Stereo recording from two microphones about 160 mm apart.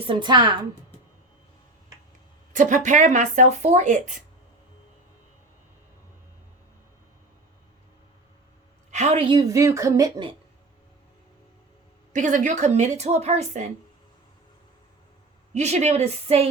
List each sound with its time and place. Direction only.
0.1 s speech: 30° right (ahead or behind)
2.5 s speech: 50° right (ahead or behind)
8.9 s a woman's voice: 45° right (ahead or behind)
9.5 s speech: 20° right (ahead or behind)
12.1 s speech: 50° right (ahead or behind)
15.5 s speech: 45° right (ahead or behind)